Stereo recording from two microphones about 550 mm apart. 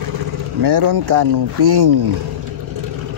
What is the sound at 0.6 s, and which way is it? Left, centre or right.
Speech, right.